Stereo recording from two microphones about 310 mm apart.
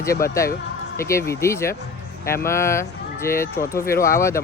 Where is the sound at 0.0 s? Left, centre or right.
Centre.